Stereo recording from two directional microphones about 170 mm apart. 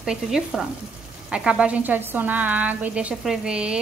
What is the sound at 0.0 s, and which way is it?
A woman's voice, 5° right (ahead or behind).